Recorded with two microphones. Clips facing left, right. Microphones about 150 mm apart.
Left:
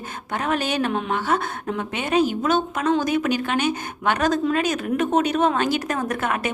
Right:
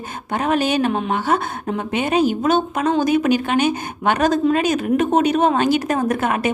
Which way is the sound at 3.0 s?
15° right (ahead or behind).